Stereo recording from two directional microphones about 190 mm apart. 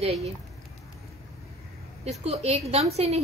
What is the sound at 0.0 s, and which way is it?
Speech, 35° right (ahead or behind).